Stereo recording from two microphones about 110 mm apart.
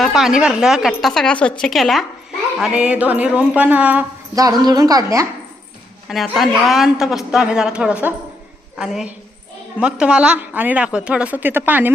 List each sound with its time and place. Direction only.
0.0 s a woman's voice: centre (ahead or behind)
2.6 s a woman's voice: 10° right (ahead or behind)
4.4 s a woman's voice: 35° right (ahead or behind)
6.1 s a woman's voice: centre (ahead or behind); by 11.9 s 15° right (ahead or behind)